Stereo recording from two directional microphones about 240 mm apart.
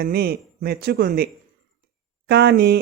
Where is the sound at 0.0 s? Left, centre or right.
Right.